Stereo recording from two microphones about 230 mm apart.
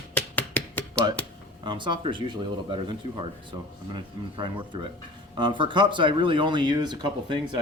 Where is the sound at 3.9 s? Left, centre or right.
Right.